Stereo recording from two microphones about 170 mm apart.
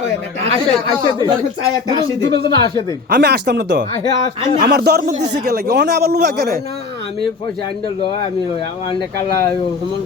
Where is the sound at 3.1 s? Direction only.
80° right.